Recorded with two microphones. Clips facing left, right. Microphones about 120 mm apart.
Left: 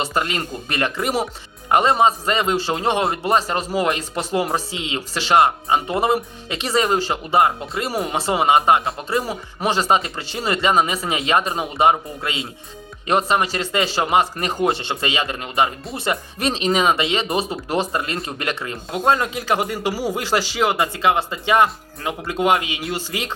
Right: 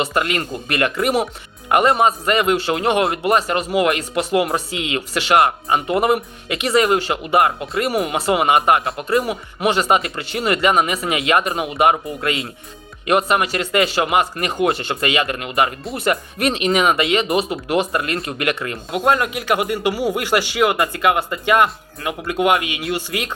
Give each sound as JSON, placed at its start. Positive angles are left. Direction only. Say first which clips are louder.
{"t": 0.0, "sound": "a man's voice", "louder": "right 2 dB", "side_deg": 30}